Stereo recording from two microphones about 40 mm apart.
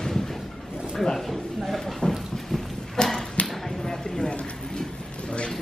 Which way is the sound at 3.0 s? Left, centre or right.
Centre.